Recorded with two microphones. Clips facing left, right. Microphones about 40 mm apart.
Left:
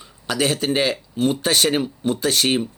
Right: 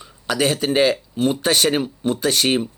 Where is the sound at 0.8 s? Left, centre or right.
Right.